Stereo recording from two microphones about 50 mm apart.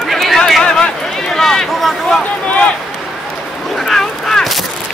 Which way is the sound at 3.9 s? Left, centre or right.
Centre.